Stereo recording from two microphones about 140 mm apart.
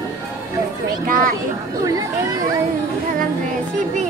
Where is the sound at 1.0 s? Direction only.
75° right (ahead or behind).